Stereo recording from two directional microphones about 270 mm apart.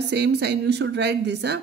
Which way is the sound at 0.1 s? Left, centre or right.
Right.